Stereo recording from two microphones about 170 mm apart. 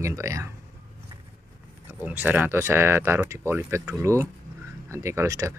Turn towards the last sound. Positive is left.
turn(degrees=-20)  # may be behind; listen again after turning